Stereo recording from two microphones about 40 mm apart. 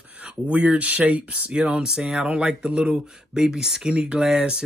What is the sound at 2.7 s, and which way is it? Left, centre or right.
Speech, right.